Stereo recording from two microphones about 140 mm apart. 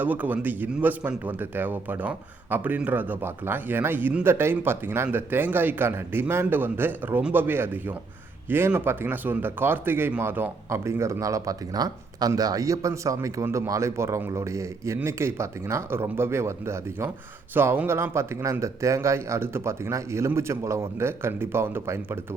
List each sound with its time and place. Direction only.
0.0 s speech: 10° right (ahead or behind)